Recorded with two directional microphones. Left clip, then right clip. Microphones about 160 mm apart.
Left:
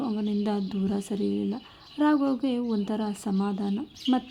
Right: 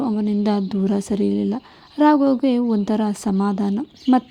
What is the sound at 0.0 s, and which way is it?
A woman's voice, 35° right (ahead or behind).